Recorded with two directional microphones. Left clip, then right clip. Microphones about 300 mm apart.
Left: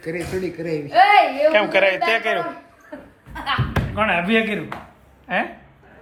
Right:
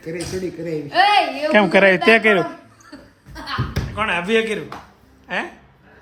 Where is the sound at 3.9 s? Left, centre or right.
Centre.